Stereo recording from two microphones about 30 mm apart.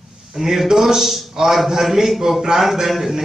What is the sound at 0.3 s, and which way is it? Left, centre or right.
A man's voice, centre.